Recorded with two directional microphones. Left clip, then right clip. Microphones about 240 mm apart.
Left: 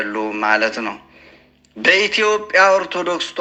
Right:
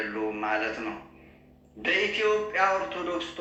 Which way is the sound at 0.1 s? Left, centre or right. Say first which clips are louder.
Left 11 dB; left.